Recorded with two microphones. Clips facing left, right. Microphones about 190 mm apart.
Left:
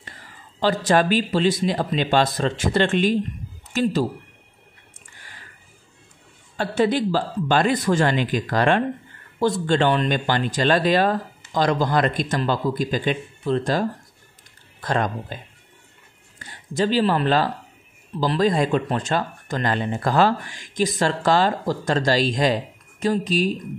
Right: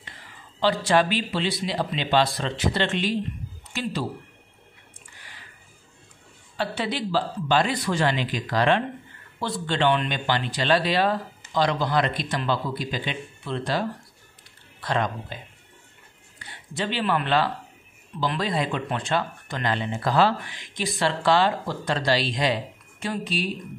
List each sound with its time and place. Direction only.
0.0 s speech: 45° left (ahead or behind)
6.5 s speech: 45° left (ahead or behind)
16.3 s speech: 45° left (ahead or behind)